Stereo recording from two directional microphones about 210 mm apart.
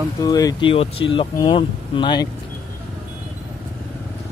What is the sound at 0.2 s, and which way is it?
Speech, 15° left (ahead or behind).